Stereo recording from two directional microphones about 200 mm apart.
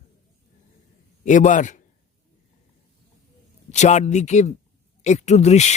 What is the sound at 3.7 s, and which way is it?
Speech, 35° left (ahead or behind).